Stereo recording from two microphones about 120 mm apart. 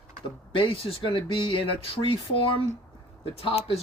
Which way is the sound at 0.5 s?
45° left (ahead or behind).